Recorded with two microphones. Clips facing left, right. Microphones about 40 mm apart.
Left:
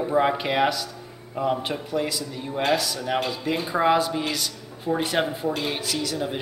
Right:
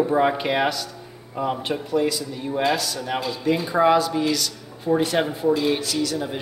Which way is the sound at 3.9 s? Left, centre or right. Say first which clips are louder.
Right 2 dB; centre.